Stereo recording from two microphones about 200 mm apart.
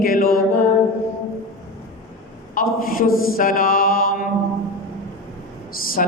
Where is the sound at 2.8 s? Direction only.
45° left (ahead or behind).